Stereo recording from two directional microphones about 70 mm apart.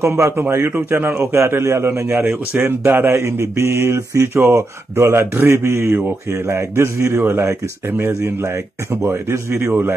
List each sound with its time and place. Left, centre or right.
0.0 s a man's voice: right
3.2 s speech: right